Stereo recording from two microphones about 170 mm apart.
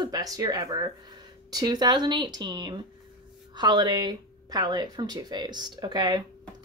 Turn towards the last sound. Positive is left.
turn(degrees=-25)  # may be behind; listen again after turning